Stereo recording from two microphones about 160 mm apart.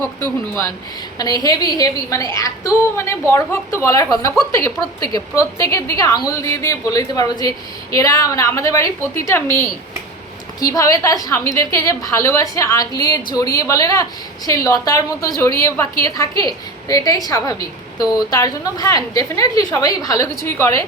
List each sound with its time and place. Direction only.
0.2 s a woman's voice: 15° left (ahead or behind)
10.6 s a woman's voice: 20° left (ahead or behind)